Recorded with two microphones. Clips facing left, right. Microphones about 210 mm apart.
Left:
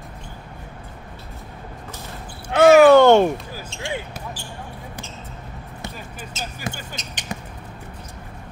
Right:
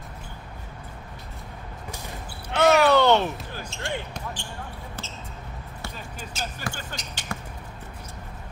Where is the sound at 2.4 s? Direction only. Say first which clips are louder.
Left 8 dB; 50° left (ahead or behind).